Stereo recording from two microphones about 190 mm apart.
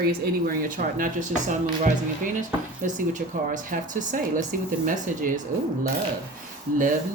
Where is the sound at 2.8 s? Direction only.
40° right (ahead or behind).